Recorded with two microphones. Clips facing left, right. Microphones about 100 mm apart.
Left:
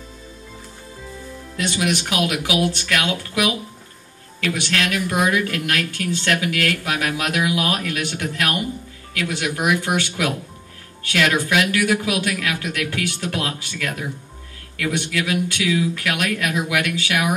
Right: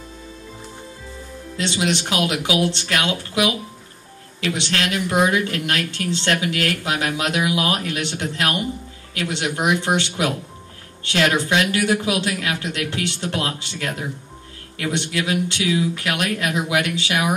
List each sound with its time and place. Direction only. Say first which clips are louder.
1.6 s speech: even; 25° right (ahead or behind)